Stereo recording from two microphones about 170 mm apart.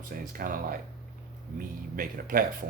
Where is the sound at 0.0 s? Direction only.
55° right (ahead or behind).